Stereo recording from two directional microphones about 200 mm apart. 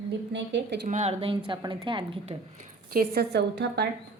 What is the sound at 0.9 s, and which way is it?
Speech, 30° right (ahead or behind).